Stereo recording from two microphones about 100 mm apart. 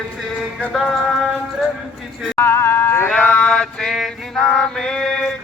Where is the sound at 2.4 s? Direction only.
25° left (ahead or behind).